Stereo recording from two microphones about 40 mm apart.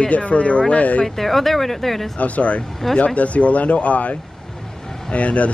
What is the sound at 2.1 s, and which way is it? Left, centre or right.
Speech, left.